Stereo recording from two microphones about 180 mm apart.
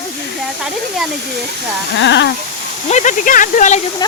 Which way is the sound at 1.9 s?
80° left.